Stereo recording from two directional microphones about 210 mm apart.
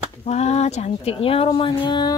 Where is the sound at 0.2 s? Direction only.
30° left (ahead or behind).